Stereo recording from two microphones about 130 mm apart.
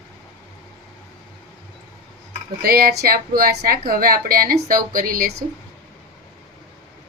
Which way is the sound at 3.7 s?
90° right.